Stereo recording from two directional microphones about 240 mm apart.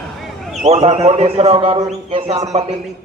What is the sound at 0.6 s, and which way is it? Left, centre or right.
Speech, right.